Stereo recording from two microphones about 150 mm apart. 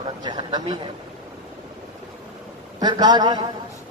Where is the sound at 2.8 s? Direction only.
25° right (ahead or behind).